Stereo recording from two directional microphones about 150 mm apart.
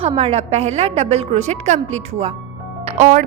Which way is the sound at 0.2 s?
40° right (ahead or behind).